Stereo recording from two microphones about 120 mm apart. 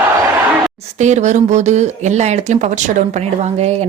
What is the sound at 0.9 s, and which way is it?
Speech, 75° right (ahead or behind).